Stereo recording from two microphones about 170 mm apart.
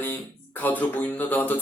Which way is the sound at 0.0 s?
10° left (ahead or behind).